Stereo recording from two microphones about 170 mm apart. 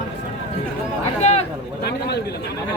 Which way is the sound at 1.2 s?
40° left (ahead or behind).